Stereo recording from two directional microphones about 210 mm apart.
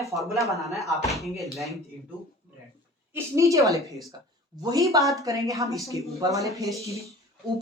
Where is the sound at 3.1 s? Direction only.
15° right (ahead or behind).